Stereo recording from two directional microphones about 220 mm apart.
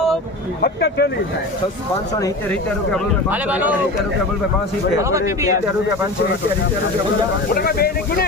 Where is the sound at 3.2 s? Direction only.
5° right (ahead or behind).